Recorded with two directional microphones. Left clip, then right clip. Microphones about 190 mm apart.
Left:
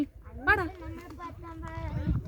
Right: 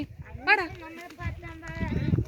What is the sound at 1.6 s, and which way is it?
Clip-clop, 65° left (ahead or behind).